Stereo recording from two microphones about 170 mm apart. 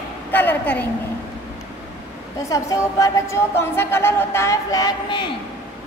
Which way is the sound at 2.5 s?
20° left (ahead or behind).